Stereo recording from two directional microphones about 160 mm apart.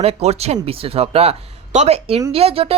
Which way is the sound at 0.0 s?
40° right (ahead or behind).